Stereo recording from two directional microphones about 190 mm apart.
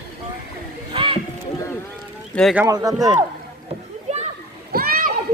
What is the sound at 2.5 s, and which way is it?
Speech, 15° right (ahead or behind).